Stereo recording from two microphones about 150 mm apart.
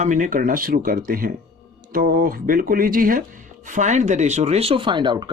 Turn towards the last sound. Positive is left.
turn(degrees=-30)  # may be behind; listen again after turning